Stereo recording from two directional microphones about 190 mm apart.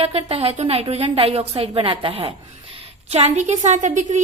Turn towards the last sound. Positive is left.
turn(degrees=-40)  # may be behind; listen again after turning